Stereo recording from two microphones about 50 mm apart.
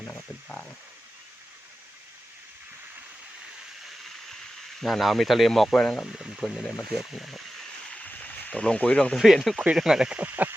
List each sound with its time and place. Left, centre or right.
0.4 s a sound: centre
4.8 s speech: centre
5.7 s speech: centre
6.1 s speech: centre
6.6 s speech: centre
7.9 s a sound: left
8.8 s speech: left
9.1 s speech: centre
10.2 s speech: right